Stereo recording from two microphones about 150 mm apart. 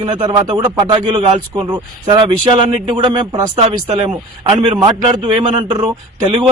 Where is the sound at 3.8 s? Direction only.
45° right (ahead or behind).